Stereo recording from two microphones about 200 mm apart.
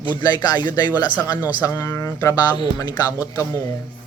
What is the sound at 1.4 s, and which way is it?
Speech, 10° right (ahead or behind).